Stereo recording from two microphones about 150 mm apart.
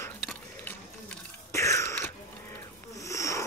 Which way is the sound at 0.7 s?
15° left (ahead or behind).